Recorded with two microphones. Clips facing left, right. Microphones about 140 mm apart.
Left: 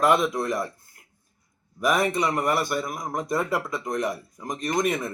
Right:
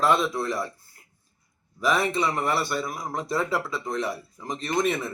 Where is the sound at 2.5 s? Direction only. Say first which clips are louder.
Left 2 dB; 20° left (ahead or behind).